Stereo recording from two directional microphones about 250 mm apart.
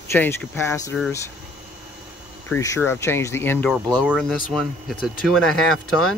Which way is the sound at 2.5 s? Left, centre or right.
Centre.